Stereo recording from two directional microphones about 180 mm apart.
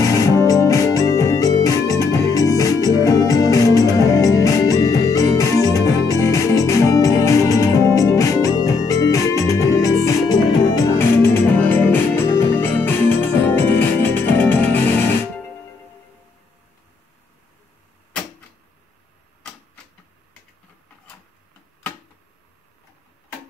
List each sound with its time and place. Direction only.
0.0 s music: 20° left (ahead or behind)